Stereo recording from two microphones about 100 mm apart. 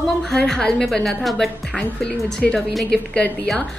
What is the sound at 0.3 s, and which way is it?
A woman's voice, 5° left (ahead or behind).